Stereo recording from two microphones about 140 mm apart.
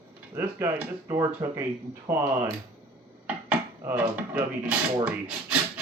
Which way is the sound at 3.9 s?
10° right (ahead or behind).